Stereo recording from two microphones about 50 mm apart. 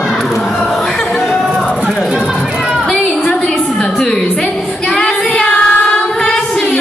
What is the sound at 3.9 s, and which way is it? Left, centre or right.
Music, centre.